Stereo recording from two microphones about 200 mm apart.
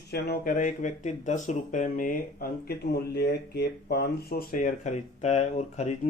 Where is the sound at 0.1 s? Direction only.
50° left (ahead or behind).